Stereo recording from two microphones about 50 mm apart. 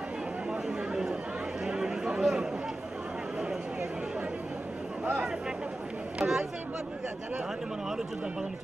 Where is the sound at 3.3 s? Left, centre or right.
Centre.